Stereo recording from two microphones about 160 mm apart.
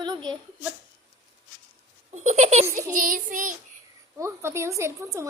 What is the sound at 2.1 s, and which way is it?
Speech, 45° right (ahead or behind).